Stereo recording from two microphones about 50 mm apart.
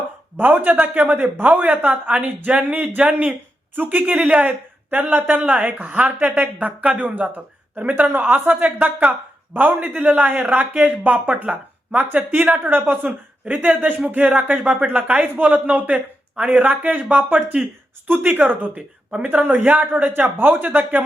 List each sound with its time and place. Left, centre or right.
0.3 s speech: right
11.4 s speech: right
12.0 s speech: right
12.4 s speech: right
20.6 s speech: right